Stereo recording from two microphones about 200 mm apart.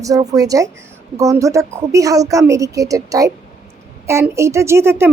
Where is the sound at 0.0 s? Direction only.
15° right (ahead or behind).